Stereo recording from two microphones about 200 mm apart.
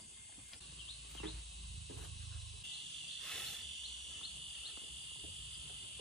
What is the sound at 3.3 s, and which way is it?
Cricket, centre (ahead or behind).